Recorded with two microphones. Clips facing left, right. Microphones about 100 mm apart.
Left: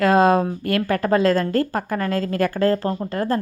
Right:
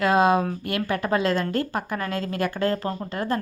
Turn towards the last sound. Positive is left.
turn(degrees=40)  # may be behind; listen again after turning